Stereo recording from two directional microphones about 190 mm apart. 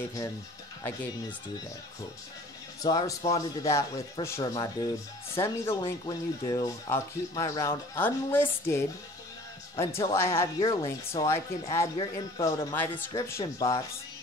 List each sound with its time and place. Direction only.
2.8 s speech: 20° left (ahead or behind)
10.6 s speech: 25° left (ahead or behind)
11.1 s speech: 15° left (ahead or behind)